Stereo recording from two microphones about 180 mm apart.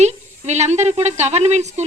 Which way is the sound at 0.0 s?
40° right (ahead or behind).